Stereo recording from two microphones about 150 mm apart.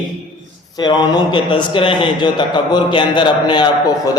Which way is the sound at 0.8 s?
30° left (ahead or behind).